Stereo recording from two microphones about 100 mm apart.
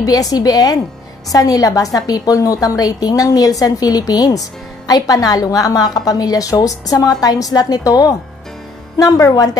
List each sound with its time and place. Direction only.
0.0 s a woman's voice: 35° left (ahead or behind)